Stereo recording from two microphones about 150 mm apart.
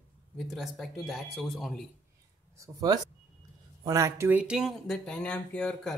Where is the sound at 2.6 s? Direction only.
25° right (ahead or behind).